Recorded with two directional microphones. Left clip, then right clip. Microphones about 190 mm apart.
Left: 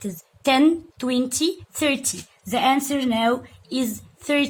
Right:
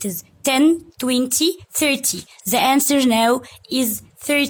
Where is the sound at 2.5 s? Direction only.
50° right (ahead or behind).